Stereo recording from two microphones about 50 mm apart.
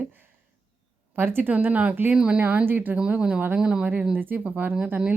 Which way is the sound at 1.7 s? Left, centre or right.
Right.